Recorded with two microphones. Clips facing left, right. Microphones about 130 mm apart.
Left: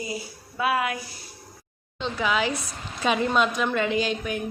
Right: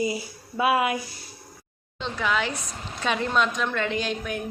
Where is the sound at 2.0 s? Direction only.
5° left (ahead or behind).